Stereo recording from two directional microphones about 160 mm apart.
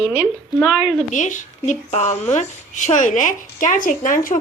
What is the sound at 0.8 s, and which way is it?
Speech, 50° left (ahead or behind).